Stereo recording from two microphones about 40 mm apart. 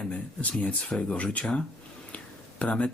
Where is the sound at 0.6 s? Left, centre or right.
Left.